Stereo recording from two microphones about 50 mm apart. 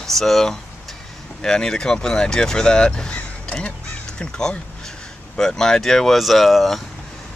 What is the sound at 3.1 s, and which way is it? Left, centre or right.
Music, left.